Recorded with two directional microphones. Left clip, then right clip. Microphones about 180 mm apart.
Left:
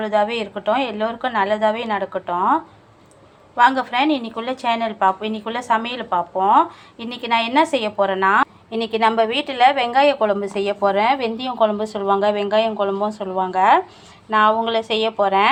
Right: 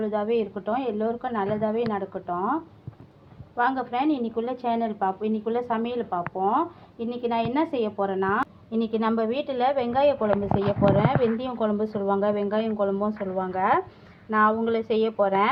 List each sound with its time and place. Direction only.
0.0 s a woman's voice: 20° left (ahead or behind)